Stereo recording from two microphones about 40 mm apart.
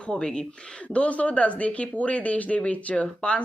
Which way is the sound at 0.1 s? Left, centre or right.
Left.